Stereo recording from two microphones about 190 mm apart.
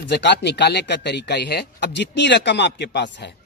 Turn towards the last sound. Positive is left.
turn(degrees=65)  # may be behind; listen again after turning